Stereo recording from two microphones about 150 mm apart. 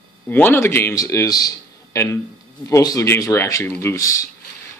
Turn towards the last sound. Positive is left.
turn(degrees=20)  # may be behind; listen again after turning